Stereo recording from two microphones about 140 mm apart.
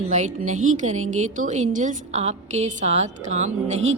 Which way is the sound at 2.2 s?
50° right (ahead or behind).